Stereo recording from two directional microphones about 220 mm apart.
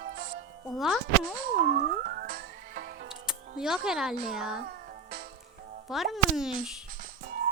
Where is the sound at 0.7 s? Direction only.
Centre (ahead or behind).